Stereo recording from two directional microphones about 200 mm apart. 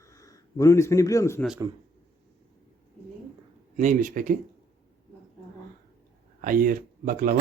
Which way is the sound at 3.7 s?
40° right (ahead or behind).